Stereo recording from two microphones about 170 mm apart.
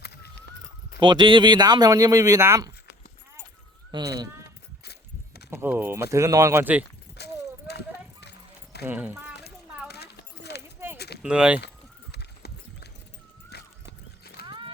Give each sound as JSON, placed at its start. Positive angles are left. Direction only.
{"t": 0.0, "sound": "a sound", "side_deg": 70}
{"t": 0.9, "sound": "speech", "side_deg": -25}
{"t": 3.9, "sound": "speech", "side_deg": -25}
{"t": 5.5, "sound": "speech", "side_deg": -15}
{"t": 7.2, "sound": "keys jangling", "side_deg": 75}
{"t": 7.7, "sound": "clip-clop", "side_deg": 75}
{"t": 8.8, "sound": "speech", "side_deg": -10}
{"t": 9.9, "sound": "keys jangling", "side_deg": 75}
{"t": 10.9, "sound": "a sound", "side_deg": 75}
{"t": 11.2, "sound": "speech", "side_deg": -5}
{"t": 12.1, "sound": "clip-clop", "side_deg": 75}
{"t": 13.5, "sound": "horse", "side_deg": 70}
{"t": 14.4, "sound": "horse", "side_deg": -25}